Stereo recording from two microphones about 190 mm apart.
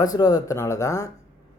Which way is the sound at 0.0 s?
20° left (ahead or behind).